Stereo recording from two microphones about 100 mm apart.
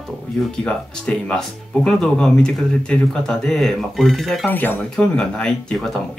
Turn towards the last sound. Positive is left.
turn(degrees=5)  # may be behind; listen again after turning